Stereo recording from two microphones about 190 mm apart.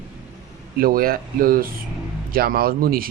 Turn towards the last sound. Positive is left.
turn(degrees=-50)  # may be behind; listen again after turning